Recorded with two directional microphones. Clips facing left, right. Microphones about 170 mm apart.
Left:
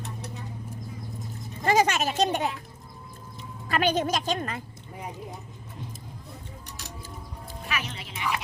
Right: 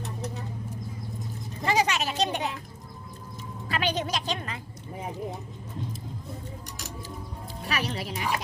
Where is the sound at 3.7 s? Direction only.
50° left (ahead or behind).